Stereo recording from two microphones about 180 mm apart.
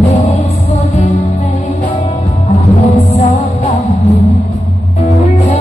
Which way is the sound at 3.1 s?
35° left (ahead or behind).